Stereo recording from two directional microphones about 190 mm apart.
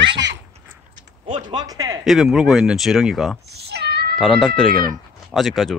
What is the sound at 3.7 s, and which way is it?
Cat, 60° right (ahead or behind).